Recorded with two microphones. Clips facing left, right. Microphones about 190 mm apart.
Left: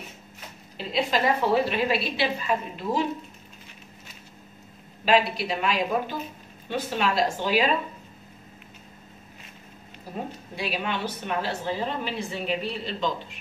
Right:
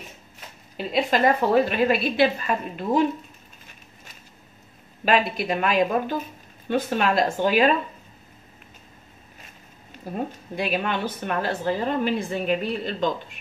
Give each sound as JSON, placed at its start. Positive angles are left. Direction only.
{"t": 0.9, "sound": "a woman's voice", "side_deg": -50}
{"t": 5.0, "sound": "a woman's voice", "side_deg": -55}
{"t": 10.1, "sound": "a woman's voice", "side_deg": -50}